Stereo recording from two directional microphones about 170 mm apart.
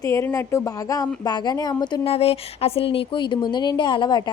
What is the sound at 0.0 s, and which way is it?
A woman's voice, 15° left (ahead or behind).